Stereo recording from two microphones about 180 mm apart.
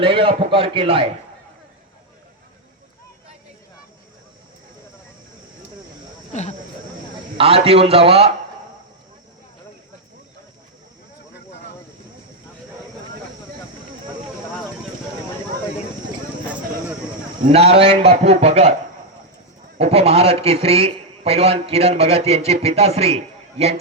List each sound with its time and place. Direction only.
0.0 s a man's voice: 30° right (ahead or behind)
6.3 s speech: 40° left (ahead or behind)
7.3 s a man's voice: 35° right (ahead or behind)
17.4 s a man's voice: 35° right (ahead or behind)
19.8 s a man's voice: 35° right (ahead or behind)